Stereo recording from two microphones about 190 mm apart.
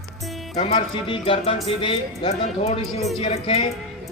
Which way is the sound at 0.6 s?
30° left (ahead or behind).